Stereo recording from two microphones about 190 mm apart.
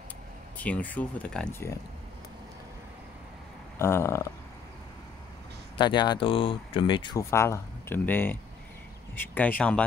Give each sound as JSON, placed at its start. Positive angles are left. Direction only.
{"t": 0.6, "sound": "speech", "side_deg": 10}
{"t": 3.7, "sound": "speech", "side_deg": 15}
{"t": 5.8, "sound": "speech", "side_deg": 20}